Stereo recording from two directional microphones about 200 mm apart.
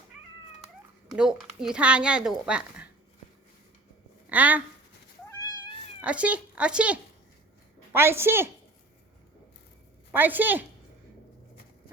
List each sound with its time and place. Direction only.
1.1 s a woman's voice: 5° right (ahead or behind)
4.3 s a woman's voice: 10° right (ahead or behind)
5.3 s cat: 20° left (ahead or behind)
6.0 s a woman's voice: 5° right (ahead or behind)
10.1 s a woman's voice: 10° right (ahead or behind)